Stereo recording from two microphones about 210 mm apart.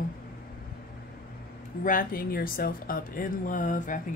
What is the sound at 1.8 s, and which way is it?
Speech, 45° left (ahead or behind).